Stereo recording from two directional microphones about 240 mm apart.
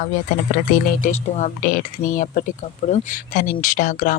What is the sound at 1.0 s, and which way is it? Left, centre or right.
Speech, left.